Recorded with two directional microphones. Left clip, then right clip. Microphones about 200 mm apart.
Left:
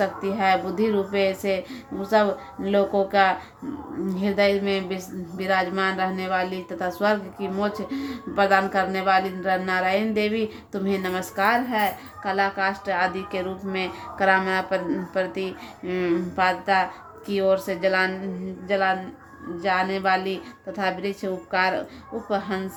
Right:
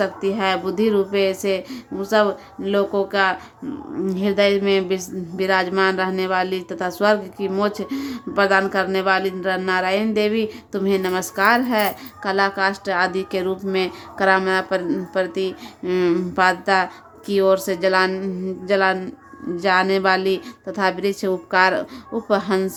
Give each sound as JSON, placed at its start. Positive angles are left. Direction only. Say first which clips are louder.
{"t": 0.0, "sound": "a woman's voice", "louder": "right 2 dB", "side_deg": -15}
{"t": 4.1, "sound": "a woman's voice", "louder": "right 3 dB", "side_deg": -20}